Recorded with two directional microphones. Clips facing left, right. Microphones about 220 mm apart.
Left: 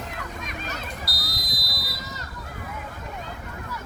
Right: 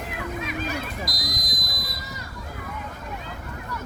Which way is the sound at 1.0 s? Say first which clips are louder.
Right 4 dB; 15° right (ahead or behind).